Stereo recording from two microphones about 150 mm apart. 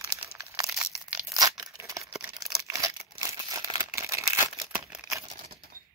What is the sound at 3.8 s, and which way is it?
Crumpling, 20° right (ahead or behind).